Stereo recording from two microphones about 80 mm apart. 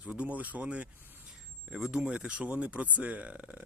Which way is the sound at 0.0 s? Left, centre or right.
Centre.